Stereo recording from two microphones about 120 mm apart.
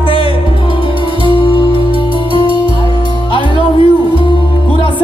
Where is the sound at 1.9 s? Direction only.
45° right (ahead or behind).